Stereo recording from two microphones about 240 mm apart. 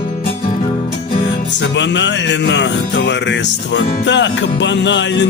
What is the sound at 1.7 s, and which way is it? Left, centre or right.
Music, left.